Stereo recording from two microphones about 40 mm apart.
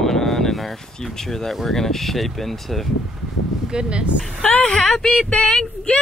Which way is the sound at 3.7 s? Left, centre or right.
Right.